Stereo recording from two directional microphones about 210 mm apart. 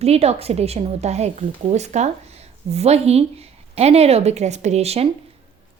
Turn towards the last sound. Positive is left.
turn(degrees=-30)  # may be behind; listen again after turning